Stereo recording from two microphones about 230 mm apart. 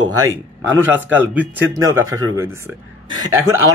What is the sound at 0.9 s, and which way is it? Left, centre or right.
Speech, centre.